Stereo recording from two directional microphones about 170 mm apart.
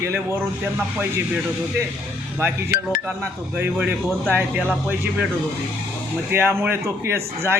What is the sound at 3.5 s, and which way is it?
A man's voice, 10° right (ahead or behind).